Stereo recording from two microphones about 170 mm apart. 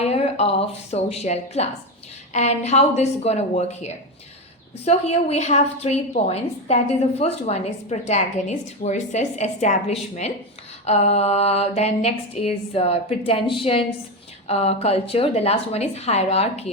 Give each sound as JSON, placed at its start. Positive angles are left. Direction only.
{"t": 0.0, "sound": "a woman's voice", "side_deg": 35}